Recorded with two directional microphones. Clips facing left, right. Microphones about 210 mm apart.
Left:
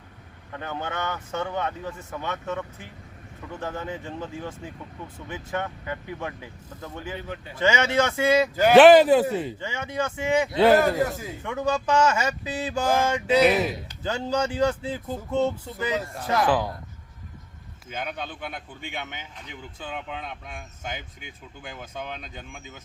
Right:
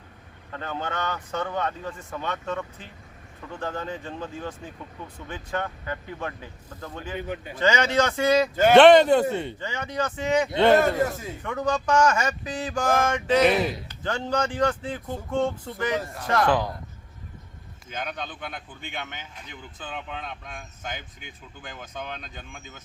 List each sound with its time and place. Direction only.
0.5 s speech: 10° left (ahead or behind)
7.2 s speech: 15° right (ahead or behind)
7.6 s a man's voice: 10° left (ahead or behind)
17.8 s speech: 5° left (ahead or behind)